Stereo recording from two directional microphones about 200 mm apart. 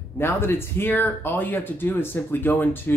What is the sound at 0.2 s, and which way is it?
Speech, 10° left (ahead or behind).